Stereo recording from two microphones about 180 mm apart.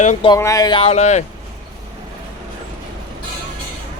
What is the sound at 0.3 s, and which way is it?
Speech, 20° left (ahead or behind).